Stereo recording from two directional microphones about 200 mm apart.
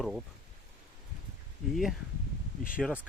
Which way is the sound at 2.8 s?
5° right (ahead or behind).